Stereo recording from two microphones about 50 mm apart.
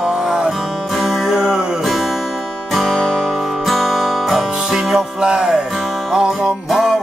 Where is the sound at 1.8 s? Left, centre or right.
Centre.